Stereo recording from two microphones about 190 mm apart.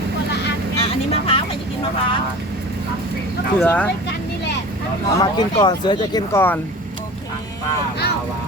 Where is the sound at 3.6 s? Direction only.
5° left (ahead or behind).